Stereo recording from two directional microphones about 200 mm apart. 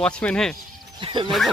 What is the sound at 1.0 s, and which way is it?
Speech, 25° right (ahead or behind).